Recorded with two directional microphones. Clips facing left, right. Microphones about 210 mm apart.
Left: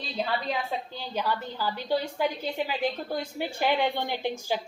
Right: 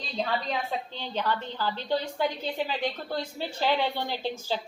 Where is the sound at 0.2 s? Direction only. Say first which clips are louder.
Even; 5° left (ahead or behind).